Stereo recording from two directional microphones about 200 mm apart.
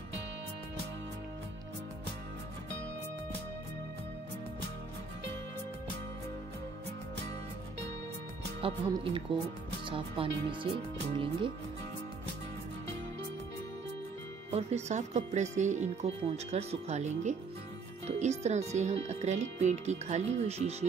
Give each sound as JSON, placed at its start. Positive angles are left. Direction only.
{"t": 8.5, "sound": "speech", "side_deg": -30}
{"t": 14.5, "sound": "speech", "side_deg": -35}